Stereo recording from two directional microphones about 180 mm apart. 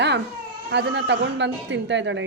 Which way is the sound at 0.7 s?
70° right (ahead or behind).